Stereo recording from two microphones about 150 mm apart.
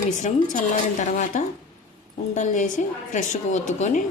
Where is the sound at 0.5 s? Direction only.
60° left (ahead or behind).